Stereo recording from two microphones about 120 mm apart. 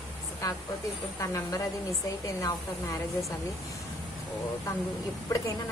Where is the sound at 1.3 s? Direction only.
25° left (ahead or behind).